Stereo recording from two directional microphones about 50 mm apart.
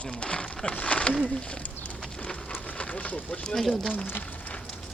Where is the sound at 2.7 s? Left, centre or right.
Left.